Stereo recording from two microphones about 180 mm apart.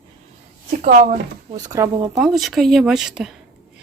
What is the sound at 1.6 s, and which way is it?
Speech, 20° right (ahead or behind).